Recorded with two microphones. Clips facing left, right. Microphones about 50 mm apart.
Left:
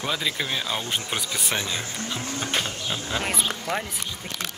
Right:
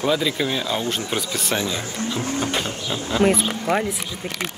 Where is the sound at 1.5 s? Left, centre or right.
Left.